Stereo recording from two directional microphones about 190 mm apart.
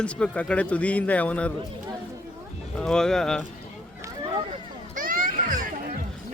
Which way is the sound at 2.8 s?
5° left (ahead or behind).